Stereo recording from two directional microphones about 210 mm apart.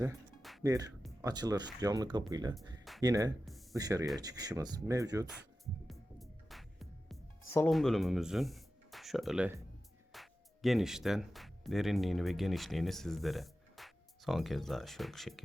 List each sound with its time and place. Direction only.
0.6 s speech: 15° right (ahead or behind)
3.4 s a sound: centre (ahead or behind)
3.8 s speech: 15° right (ahead or behind)
5.9 s music: centre (ahead or behind)
7.5 s speech: 5° left (ahead or behind)